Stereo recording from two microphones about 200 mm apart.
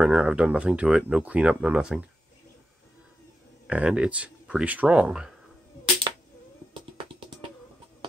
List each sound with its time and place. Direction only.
0.0 s speech: 5° right (ahead or behind)
3.6 s speech: 5° right (ahead or behind)